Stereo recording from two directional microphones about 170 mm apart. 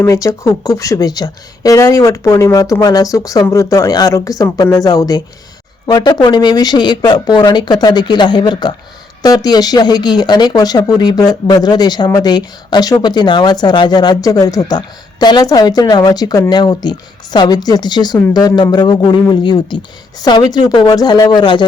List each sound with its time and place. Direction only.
0.0 s speech: 20° left (ahead or behind)